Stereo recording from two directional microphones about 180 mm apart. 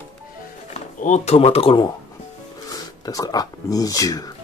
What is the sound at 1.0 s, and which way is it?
Speech, 40° left (ahead or behind).